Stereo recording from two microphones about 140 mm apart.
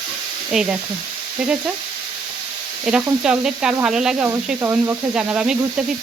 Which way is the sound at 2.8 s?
5° right (ahead or behind).